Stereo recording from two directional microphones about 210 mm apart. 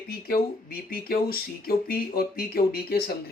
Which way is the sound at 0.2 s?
45° left (ahead or behind).